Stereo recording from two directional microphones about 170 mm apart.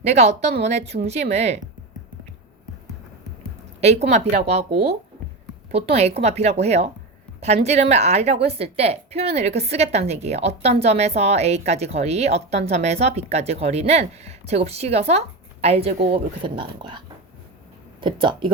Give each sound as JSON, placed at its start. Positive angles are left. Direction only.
{"t": 0.1, "sound": "a woman's voice", "side_deg": -40}
{"t": 3.8, "sound": "a woman's voice", "side_deg": -40}
{"t": 18.0, "sound": "speech", "side_deg": -30}